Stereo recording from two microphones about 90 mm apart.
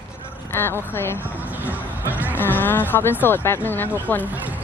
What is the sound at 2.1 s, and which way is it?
Music, 20° right (ahead or behind).